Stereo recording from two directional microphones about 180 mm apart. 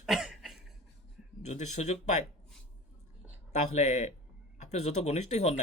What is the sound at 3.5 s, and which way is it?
Speech, 40° left (ahead or behind).